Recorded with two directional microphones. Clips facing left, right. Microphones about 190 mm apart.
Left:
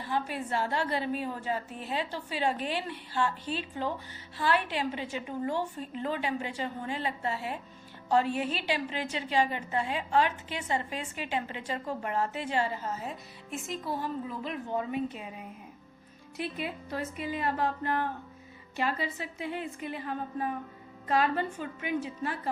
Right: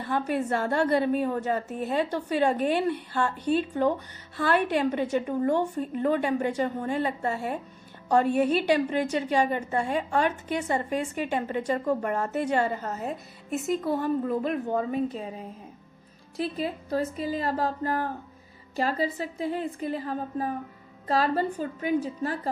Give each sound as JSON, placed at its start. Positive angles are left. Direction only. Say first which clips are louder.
{"t": 0.1, "sound": "a woman's voice", "louder": "right 5 dB", "side_deg": -45}
{"t": 13.8, "sound": "a woman's voice", "louder": "right 8 dB", "side_deg": -55}